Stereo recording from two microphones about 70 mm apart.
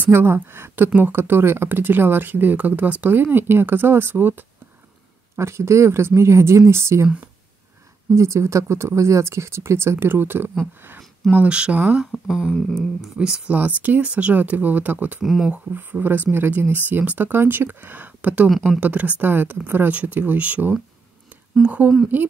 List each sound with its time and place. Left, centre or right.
0.0 s speech: right
5.3 s speech: right
8.1 s speech: right
11.3 s speech: centre
12.3 s speech: centre
13.6 s speech: right
15.2 s speech: centre
15.7 s speech: right